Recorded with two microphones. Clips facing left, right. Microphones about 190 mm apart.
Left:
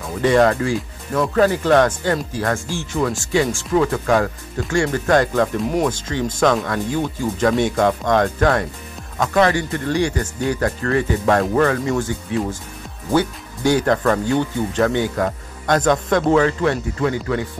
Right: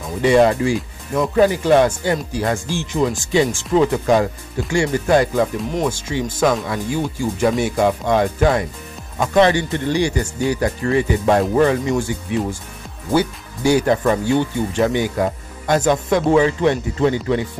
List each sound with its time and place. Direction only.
0.2 s speech: 10° right (ahead or behind)
9.3 s speech: 25° right (ahead or behind)